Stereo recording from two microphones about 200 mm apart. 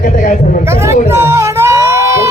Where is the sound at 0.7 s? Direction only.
15° right (ahead or behind).